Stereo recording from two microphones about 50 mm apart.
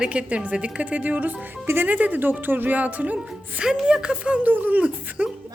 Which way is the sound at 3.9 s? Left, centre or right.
Centre.